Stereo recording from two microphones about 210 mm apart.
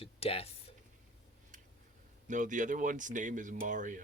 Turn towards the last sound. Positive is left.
turn(degrees=-40)  # may be behind; listen again after turning